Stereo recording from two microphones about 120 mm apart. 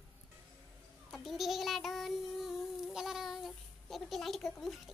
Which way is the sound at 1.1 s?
Centre (ahead or behind).